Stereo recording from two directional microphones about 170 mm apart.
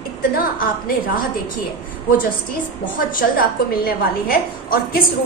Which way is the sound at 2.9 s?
55° left (ahead or behind).